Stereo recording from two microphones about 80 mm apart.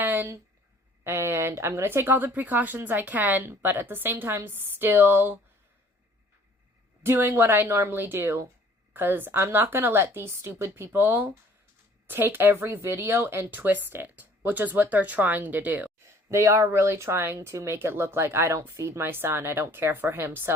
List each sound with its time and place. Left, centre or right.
0.0 s a sound: right
1.0 s speech: right
7.0 s speech: right
16.3 s speech: right